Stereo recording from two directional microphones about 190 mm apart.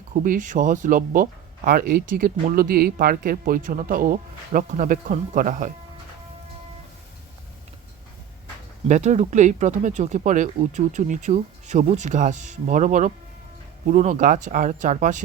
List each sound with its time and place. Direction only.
0.1 s speech: 45° right (ahead or behind)
8.9 s speech: 35° right (ahead or behind)